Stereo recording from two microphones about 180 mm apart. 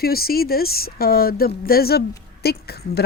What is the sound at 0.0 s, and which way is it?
Speech, 55° left (ahead or behind).